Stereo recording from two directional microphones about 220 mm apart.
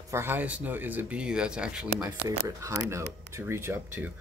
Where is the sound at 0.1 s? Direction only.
10° right (ahead or behind).